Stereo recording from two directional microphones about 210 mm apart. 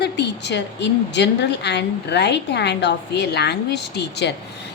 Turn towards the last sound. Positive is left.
turn(degrees=55)  # may be behind; listen again after turning